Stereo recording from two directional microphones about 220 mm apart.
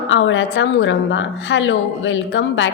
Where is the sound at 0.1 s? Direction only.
60° left (ahead or behind).